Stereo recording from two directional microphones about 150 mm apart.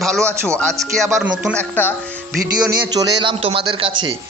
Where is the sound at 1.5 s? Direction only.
10° left (ahead or behind).